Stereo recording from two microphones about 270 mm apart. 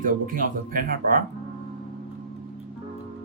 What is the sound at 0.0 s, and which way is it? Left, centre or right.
Speech, right.